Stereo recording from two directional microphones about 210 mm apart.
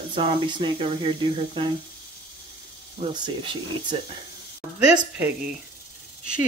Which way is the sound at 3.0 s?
20° right (ahead or behind).